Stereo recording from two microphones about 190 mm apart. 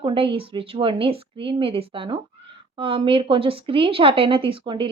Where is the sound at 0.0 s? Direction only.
25° right (ahead or behind).